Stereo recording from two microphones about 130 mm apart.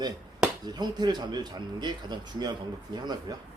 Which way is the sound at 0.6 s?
30° right (ahead or behind).